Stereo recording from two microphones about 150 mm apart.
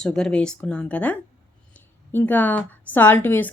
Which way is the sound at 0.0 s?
5° left (ahead or behind).